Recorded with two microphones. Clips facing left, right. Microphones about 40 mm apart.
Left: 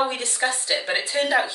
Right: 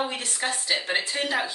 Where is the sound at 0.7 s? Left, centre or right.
Centre.